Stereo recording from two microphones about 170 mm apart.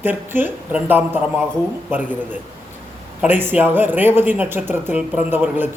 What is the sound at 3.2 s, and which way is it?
Speech, 10° right (ahead or behind).